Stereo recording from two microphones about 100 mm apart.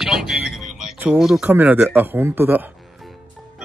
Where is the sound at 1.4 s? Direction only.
20° right (ahead or behind).